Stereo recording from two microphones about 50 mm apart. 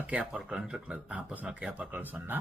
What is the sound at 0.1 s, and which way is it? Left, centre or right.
Speech, right.